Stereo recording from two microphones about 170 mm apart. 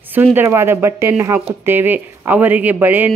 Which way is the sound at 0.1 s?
10° right (ahead or behind).